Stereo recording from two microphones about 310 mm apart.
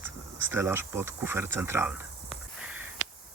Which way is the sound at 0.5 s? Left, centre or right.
Centre.